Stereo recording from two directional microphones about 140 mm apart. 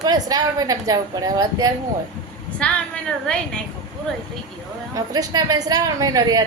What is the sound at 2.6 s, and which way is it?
A woman's voice, 10° left (ahead or behind).